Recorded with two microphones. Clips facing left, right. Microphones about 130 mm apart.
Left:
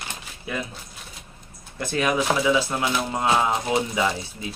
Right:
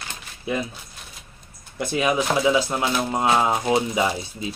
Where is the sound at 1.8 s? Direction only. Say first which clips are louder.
Right 1 dB; 15° right (ahead or behind).